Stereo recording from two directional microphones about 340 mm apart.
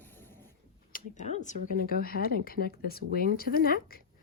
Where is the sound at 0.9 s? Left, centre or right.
Left.